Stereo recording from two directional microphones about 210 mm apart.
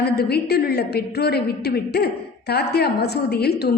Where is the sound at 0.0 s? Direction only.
50° left (ahead or behind).